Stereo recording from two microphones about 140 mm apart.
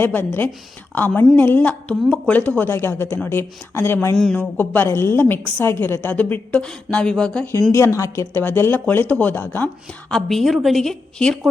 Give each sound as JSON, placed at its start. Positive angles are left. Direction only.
{"t": 0.0, "sound": "a woman's voice", "side_deg": 15}
{"t": 7.7, "sound": "a woman's voice", "side_deg": 20}
{"t": 10.1, "sound": "a woman's voice", "side_deg": 0}